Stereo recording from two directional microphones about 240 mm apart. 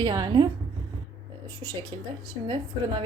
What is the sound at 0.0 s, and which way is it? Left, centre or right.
Speech, centre.